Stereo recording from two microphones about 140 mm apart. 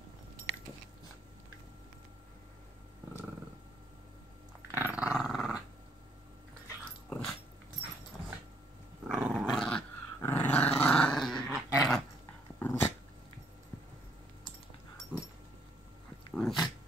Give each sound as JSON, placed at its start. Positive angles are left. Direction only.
{"t": 4.6, "sound": "dog", "side_deg": -20}
{"t": 4.9, "sound": "dog", "side_deg": -5}
{"t": 6.8, "sound": "dog", "side_deg": 5}
{"t": 9.0, "sound": "dog", "side_deg": -5}
{"t": 12.5, "sound": "dog", "side_deg": 15}
{"t": 16.3, "sound": "dog", "side_deg": 0}